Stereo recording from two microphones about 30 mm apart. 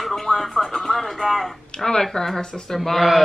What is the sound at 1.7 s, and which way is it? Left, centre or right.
Music, centre.